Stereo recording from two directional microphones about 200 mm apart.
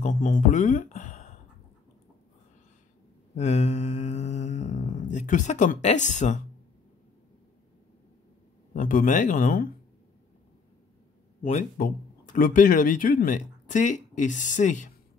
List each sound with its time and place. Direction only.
0.0 s speech: 40° left (ahead or behind)
3.3 s mantra: 35° left (ahead or behind)
8.7 s speech: 40° left (ahead or behind)
11.4 s speech: 40° left (ahead or behind)